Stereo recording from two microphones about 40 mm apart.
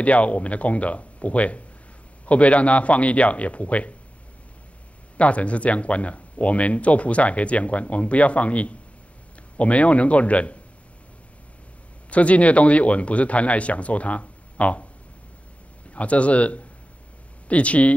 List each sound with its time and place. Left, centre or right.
0.0 s speech: left
5.1 s speech: left
12.1 s speech: left
15.9 s speech: left